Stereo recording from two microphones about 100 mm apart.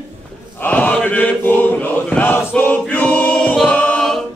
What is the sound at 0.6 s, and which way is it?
Chant, 15° left (ahead or behind).